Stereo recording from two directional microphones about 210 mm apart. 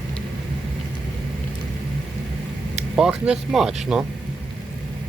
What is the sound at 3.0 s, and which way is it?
Speech, 5° right (ahead or behind).